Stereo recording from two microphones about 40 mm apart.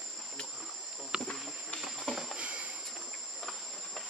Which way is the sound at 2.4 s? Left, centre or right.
Right.